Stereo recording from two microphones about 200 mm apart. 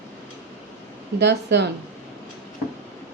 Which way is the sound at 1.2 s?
60° right (ahead or behind).